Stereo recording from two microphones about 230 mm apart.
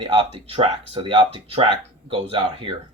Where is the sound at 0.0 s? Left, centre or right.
Right.